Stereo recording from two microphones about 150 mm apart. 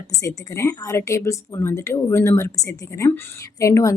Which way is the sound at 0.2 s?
20° left (ahead or behind).